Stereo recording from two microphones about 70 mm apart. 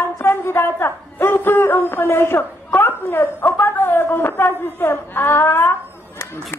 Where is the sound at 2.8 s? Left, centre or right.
Left.